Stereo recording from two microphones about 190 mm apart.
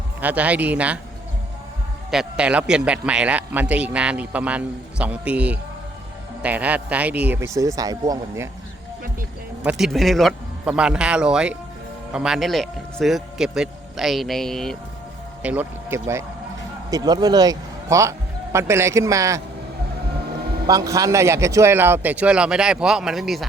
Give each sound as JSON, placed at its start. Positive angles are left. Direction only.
{"t": 0.2, "sound": "a man's voice", "side_deg": -10}
{"t": 2.0, "sound": "a man's voice", "side_deg": -5}
{"t": 9.6, "sound": "speech", "side_deg": 0}
{"t": 15.4, "sound": "a man's voice", "side_deg": -10}
{"t": 20.7, "sound": "a man's voice", "side_deg": -20}